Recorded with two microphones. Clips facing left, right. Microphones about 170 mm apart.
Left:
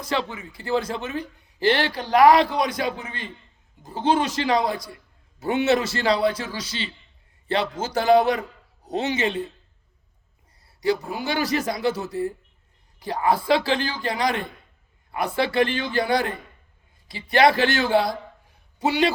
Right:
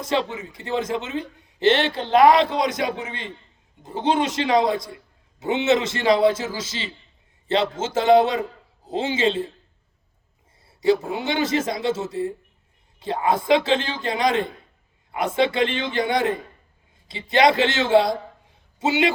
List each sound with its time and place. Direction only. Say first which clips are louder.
0.0 s a man's voice: right 3 dB; 20° right (ahead or behind)
10.7 s a sound: right 4 dB; 25° right (ahead or behind)
11.1 s a man's voice: right 2 dB; 20° right (ahead or behind)